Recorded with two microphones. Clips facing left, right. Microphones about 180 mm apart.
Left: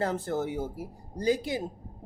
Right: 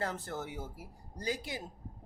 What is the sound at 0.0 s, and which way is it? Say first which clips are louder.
Speech: left 9 dB; 30° left (ahead or behind).